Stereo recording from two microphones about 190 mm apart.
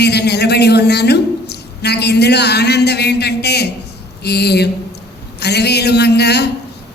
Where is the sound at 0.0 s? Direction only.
60° left (ahead or behind).